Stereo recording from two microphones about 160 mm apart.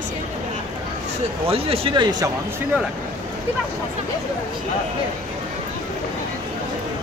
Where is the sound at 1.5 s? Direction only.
35° right (ahead or behind).